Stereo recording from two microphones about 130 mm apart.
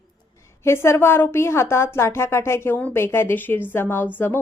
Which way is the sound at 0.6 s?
20° left (ahead or behind).